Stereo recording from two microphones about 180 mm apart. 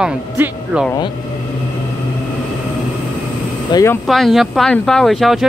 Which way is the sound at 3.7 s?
20° left (ahead or behind).